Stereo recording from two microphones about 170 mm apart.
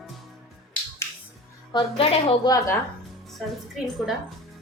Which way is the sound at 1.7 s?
30° left (ahead or behind).